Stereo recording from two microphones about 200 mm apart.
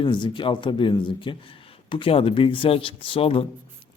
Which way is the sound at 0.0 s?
25° left (ahead or behind).